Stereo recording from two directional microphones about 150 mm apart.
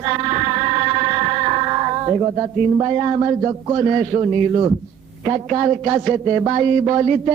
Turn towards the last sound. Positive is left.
turn(degrees=-30)  # may be behind; listen again after turning